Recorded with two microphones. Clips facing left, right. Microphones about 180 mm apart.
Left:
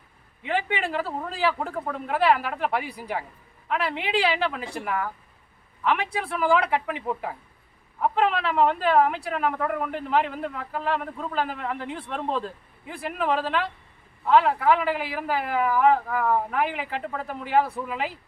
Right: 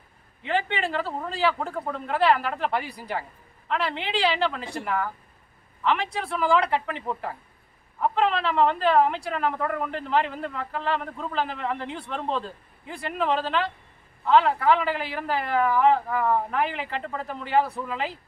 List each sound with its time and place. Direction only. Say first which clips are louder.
0.4 s a man's voice: even; 5° left (ahead or behind)